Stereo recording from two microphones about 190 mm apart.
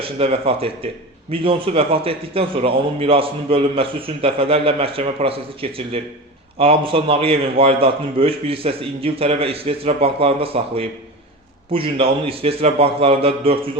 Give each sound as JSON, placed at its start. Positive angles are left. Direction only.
{"t": 0.0, "sound": "a man's voice", "side_deg": -30}